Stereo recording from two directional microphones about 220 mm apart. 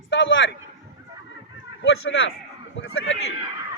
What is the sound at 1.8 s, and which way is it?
Speech, 60° left (ahead or behind).